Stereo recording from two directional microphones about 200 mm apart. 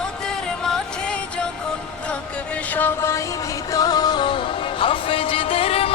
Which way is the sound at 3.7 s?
20° left (ahead or behind).